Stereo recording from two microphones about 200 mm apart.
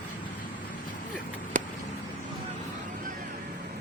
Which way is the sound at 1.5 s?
40° right (ahead or behind).